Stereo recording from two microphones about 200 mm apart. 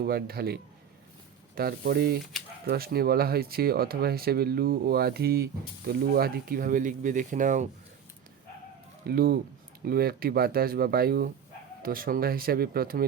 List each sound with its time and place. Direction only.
0.0 s speech: 50° right (ahead or behind)
9.0 s speech: 50° right (ahead or behind)